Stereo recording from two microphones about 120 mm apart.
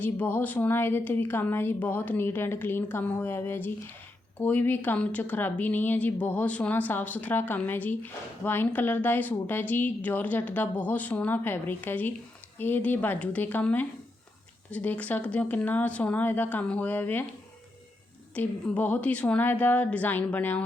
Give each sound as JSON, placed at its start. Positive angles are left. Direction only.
{"t": 0.0, "sound": "a woman's voice", "side_deg": 15}
{"t": 18.3, "sound": "a woman's voice", "side_deg": 10}